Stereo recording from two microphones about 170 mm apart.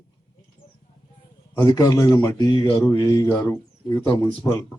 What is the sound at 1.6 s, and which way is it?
Speech, 20° left (ahead or behind).